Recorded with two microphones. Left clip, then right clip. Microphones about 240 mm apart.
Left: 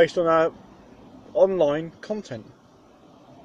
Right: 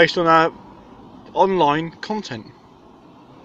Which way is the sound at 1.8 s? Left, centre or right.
Right.